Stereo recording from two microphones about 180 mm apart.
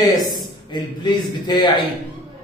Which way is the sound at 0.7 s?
25° left (ahead or behind).